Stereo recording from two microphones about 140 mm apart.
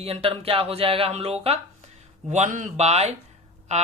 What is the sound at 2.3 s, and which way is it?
Speech, 60° right (ahead or behind).